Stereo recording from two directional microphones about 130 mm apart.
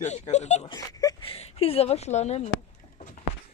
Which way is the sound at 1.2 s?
50° left (ahead or behind).